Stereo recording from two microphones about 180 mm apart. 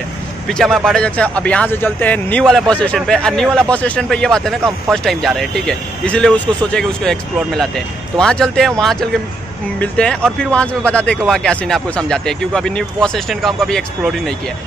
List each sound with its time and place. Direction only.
0.7 s speech: centre (ahead or behind)